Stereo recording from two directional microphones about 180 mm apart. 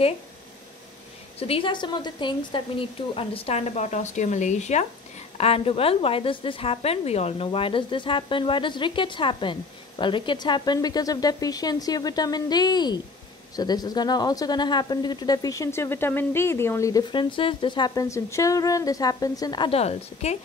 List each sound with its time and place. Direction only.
1.4 s a woman's voice: 30° left (ahead or behind)